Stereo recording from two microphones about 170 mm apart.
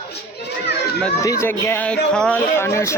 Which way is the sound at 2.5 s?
15° left (ahead or behind).